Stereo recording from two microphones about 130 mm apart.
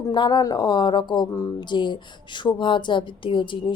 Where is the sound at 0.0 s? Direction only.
35° left (ahead or behind).